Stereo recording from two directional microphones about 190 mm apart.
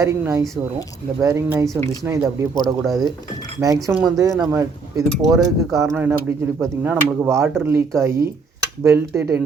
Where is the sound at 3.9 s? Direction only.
10° right (ahead or behind).